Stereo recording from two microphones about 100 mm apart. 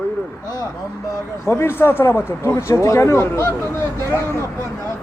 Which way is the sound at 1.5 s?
20° left (ahead or behind).